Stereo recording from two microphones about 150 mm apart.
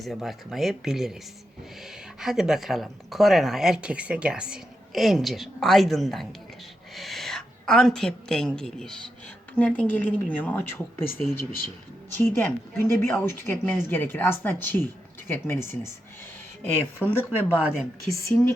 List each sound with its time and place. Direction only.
0.0 s speech: centre (ahead or behind)
2.2 s a woman's voice: 5° right (ahead or behind); by 18.5 s 20° left (ahead or behind)